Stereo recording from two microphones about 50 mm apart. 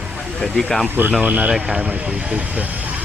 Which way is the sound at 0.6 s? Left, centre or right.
Centre.